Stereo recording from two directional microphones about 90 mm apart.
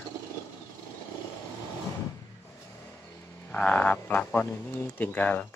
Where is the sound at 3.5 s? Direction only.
15° left (ahead or behind).